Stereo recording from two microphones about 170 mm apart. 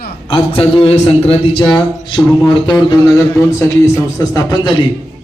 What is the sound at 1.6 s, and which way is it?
A man's voice, 25° left (ahead or behind).